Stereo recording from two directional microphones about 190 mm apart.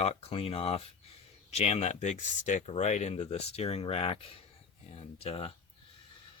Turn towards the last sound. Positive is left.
turn(degrees=30)  # may be behind; listen again after turning